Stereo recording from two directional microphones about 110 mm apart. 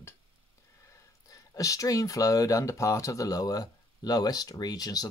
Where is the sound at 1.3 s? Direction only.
30° left (ahead or behind).